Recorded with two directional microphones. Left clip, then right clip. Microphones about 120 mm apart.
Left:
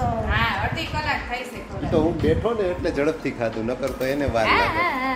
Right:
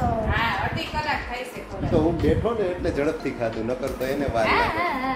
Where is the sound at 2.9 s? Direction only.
90° left.